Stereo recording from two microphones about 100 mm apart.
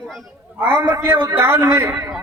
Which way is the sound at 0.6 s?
20° right (ahead or behind).